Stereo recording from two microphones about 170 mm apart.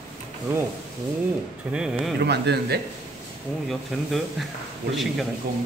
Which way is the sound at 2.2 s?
80° right.